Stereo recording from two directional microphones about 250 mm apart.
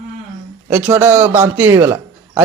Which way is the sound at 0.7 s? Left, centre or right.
Centre.